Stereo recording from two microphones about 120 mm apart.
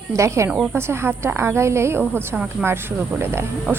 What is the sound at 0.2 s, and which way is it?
Speech, 25° right (ahead or behind).